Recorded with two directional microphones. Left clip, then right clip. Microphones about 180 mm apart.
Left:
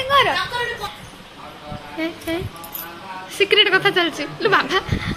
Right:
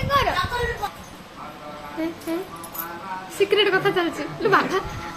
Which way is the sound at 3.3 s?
5° left (ahead or behind).